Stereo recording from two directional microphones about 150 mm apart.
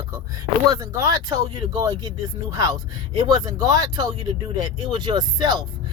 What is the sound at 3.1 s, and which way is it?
Speech, 30° right (ahead or behind).